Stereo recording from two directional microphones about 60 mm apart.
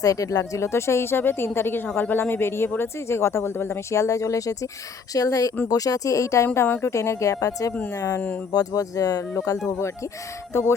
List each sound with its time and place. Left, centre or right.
0.0 s a woman's voice: left
5.1 s speech: left
8.5 s speech: left
9.6 s speech: left